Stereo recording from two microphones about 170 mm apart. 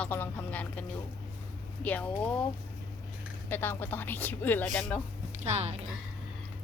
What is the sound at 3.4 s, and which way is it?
Speech, 10° left (ahead or behind).